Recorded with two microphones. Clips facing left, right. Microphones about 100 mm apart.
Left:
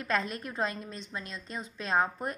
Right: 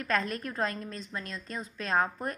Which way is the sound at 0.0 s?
20° left (ahead or behind).